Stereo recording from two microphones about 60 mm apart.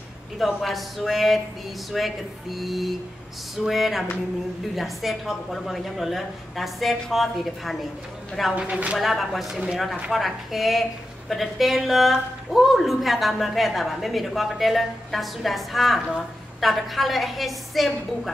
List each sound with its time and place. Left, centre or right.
0.6 s a woman's voice: centre
8.5 s speech: right
8.9 s a woman's voice: centre